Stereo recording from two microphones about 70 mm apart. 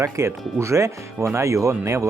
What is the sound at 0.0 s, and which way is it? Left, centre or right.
Speech, right.